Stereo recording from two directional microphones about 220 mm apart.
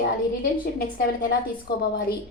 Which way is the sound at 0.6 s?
45° left (ahead or behind).